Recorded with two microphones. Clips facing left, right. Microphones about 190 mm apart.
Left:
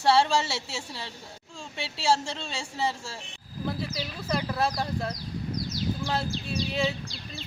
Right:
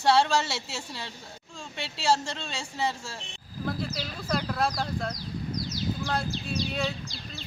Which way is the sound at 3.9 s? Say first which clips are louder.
Even; 5° left (ahead or behind).